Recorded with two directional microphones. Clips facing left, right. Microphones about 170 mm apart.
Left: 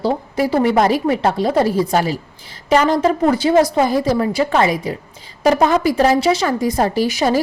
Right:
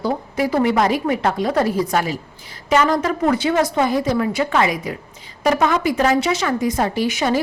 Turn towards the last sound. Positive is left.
turn(degrees=35)  # may be behind; listen again after turning